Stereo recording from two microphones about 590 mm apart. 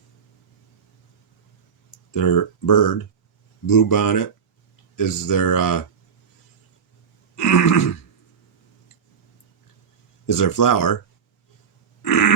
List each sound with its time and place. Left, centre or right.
2.1 s speech: left
7.3 s throat clearing: left
10.2 s speech: left
12.0 s pig: left